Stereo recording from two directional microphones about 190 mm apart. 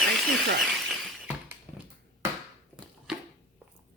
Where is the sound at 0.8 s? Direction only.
10° right (ahead or behind).